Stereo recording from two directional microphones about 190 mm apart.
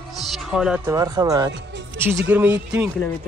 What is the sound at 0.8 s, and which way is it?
A man's voice, 20° right (ahead or behind).